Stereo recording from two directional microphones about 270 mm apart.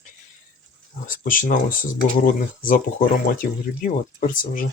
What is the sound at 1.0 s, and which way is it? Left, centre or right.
Speech, left.